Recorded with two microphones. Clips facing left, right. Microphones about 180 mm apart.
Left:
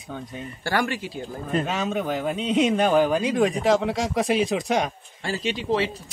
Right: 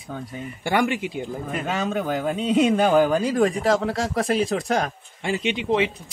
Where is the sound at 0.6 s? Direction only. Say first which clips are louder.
Right 3 dB; 15° right (ahead or behind).